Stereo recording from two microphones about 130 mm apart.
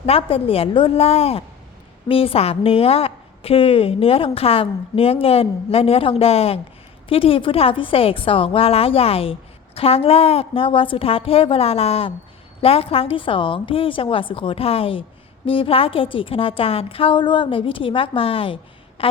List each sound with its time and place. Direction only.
0.0 s a woman's voice: 45° left (ahead or behind)